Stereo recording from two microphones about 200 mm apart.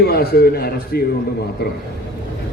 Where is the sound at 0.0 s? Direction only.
50° left (ahead or behind).